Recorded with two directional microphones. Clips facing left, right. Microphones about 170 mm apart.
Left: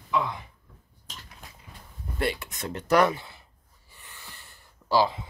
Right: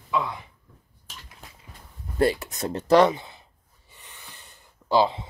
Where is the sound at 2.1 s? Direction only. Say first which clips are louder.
Right 7 dB; 40° right (ahead or behind).